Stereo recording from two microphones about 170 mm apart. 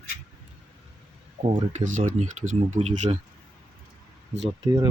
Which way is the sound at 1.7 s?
45° right (ahead or behind).